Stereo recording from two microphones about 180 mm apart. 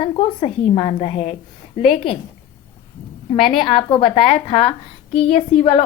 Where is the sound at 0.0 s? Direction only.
30° left (ahead or behind).